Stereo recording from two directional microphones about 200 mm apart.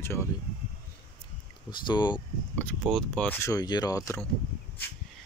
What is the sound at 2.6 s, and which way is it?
Speech, 5° left (ahead or behind).